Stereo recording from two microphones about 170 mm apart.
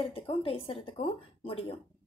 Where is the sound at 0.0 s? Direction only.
30° left (ahead or behind).